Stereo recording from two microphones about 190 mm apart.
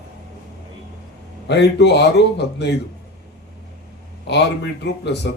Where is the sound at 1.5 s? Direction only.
65° left (ahead or behind).